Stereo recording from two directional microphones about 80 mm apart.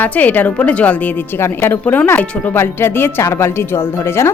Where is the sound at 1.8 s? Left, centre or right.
Left.